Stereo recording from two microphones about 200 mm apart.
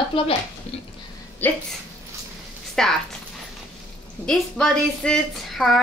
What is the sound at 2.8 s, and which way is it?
Speech, 5° left (ahead or behind).